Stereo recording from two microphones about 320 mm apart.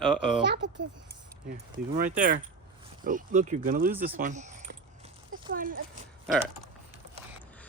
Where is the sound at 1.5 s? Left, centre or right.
Right.